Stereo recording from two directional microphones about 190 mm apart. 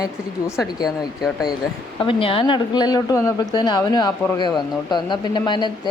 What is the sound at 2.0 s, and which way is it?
A man's voice, 30° left (ahead or behind).